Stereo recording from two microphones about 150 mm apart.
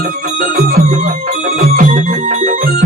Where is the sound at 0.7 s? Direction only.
70° right (ahead or behind).